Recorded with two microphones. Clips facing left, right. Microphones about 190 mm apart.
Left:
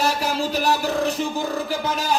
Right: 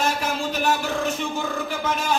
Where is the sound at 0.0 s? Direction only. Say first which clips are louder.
Left 2 dB; 35° left (ahead or behind).